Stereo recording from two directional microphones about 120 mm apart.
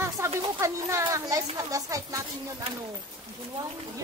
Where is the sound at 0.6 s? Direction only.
25° right (ahead or behind).